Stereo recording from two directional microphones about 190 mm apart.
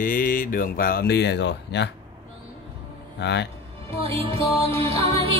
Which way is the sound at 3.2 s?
65° left (ahead or behind).